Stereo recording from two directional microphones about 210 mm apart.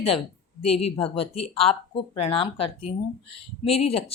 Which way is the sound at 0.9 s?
25° left (ahead or behind).